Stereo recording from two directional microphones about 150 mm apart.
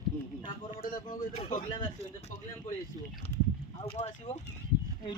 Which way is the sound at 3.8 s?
45° left (ahead or behind).